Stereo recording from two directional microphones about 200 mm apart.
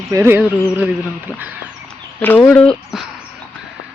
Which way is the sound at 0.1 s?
10° right (ahead or behind).